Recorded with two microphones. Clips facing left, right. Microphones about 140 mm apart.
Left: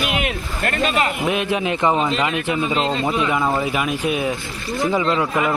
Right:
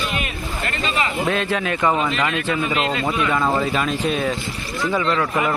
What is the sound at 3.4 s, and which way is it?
Speech, 5° left (ahead or behind).